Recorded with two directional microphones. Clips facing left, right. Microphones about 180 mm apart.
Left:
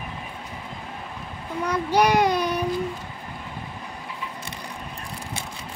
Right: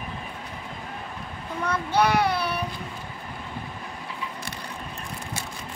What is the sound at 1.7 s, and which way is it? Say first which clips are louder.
Child singing: left 2 dB; 15° left (ahead or behind).